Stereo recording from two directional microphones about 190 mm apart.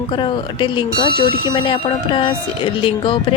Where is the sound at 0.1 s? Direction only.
25° left (ahead or behind).